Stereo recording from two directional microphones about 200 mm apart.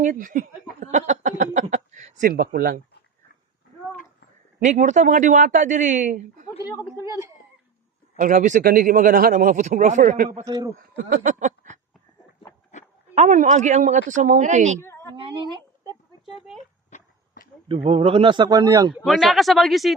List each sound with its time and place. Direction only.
0.0 s speech: 40° right (ahead or behind)
0.8 s a sound: 35° right (ahead or behind)
1.6 s speech: 35° right (ahead or behind)
4.6 s speech: 35° right (ahead or behind)
6.9 s a sound: 15° right (ahead or behind)
8.1 s speech: 40° right (ahead or behind)
10.4 s a man's voice: 20° right (ahead or behind)
10.8 s a sound: 45° right (ahead or behind)
13.1 s speech: 35° right (ahead or behind)
15.1 s a man's voice: 25° right (ahead or behind)
16.9 s a sound: 45° left (ahead or behind)
17.7 s a man's voice: 30° right (ahead or behind)
19.0 s speech: centre (ahead or behind)